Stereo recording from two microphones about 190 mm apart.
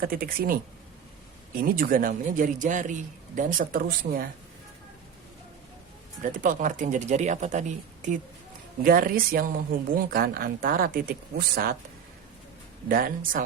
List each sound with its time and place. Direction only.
0.0 s a man's voice: 50° right (ahead or behind)
1.6 s a man's voice: 50° right (ahead or behind)
6.2 s a man's voice: 45° right (ahead or behind)
12.9 s a man's voice: 45° right (ahead or behind)